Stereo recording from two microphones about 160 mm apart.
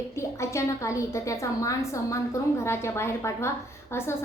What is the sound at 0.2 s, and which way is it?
A woman's voice, 20° left (ahead or behind).